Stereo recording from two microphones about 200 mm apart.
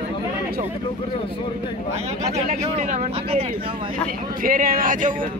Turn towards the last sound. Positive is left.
turn(degrees=-40)  # may be behind; listen again after turning